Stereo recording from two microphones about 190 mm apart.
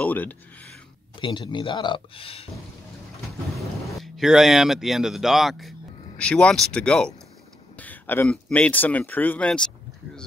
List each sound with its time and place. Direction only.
0.0 s speech: 10° left (ahead or behind)
1.2 s speech: 25° left (ahead or behind)
3.5 s speech: centre (ahead or behind)